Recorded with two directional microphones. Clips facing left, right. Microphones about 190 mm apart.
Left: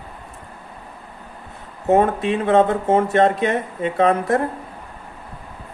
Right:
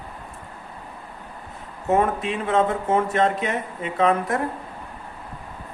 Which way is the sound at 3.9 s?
40° left (ahead or behind).